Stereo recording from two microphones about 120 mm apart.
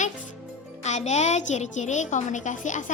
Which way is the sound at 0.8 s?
70° left (ahead or behind).